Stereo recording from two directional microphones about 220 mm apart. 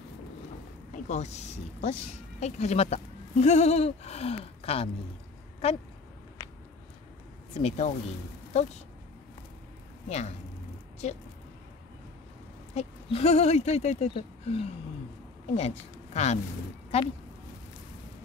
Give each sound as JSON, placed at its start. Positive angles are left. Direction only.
{"t": 1.0, "sound": "speech", "side_deg": 30}
{"t": 6.4, "sound": "a sound", "side_deg": 15}
{"t": 7.5, "sound": "speech", "side_deg": 30}
{"t": 10.0, "sound": "speech", "side_deg": 30}
{"t": 12.7, "sound": "a woman's voice", "side_deg": 30}